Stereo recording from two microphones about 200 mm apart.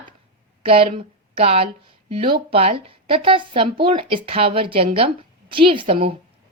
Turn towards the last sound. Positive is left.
turn(degrees=-30)  # may be behind; listen again after turning